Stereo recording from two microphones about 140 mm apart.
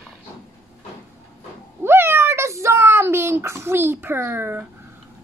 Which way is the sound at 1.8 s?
15° right (ahead or behind).